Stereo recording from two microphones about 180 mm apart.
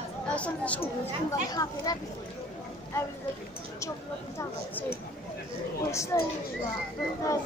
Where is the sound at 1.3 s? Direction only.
20° left (ahead or behind).